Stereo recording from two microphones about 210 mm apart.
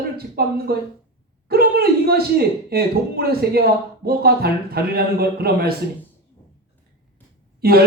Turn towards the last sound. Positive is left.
turn(degrees=-45)  # may be behind; listen again after turning